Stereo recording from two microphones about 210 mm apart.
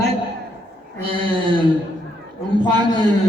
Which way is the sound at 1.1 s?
25° right (ahead or behind).